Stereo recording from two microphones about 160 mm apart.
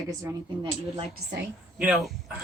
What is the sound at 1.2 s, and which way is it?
Speech, 90° right.